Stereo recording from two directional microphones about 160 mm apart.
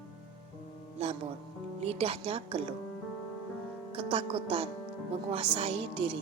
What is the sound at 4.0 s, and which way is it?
Speech, 35° right (ahead or behind).